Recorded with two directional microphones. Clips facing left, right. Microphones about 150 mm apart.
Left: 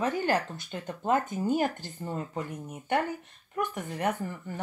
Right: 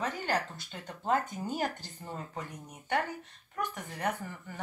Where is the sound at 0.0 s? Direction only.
50° left (ahead or behind).